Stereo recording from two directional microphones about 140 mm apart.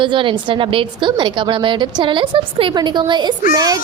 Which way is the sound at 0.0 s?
35° right (ahead or behind).